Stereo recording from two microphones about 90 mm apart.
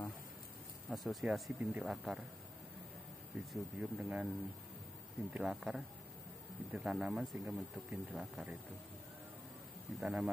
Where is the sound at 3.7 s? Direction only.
10° right (ahead or behind).